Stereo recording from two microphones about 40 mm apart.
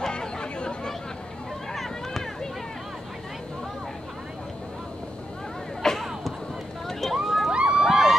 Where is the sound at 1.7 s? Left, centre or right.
Centre.